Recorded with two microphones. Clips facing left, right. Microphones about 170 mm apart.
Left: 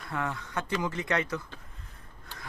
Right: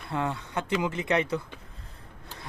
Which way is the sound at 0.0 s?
30° right (ahead or behind).